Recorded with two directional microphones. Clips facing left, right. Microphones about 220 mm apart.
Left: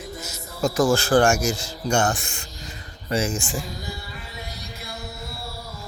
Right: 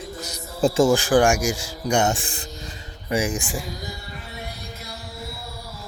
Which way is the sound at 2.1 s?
35° right (ahead or behind).